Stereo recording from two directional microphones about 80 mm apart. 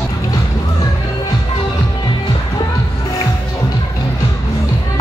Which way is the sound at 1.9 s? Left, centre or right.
Left.